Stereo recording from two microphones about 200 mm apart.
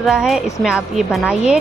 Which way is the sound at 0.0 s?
Centre (ahead or behind).